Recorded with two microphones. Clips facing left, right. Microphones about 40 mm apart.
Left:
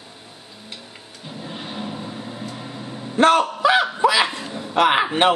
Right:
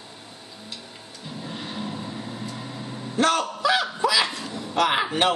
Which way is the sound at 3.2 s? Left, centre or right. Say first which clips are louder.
Left 6 dB; left.